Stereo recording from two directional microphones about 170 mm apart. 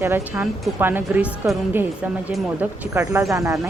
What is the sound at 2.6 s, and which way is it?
Speech, 10° right (ahead or behind).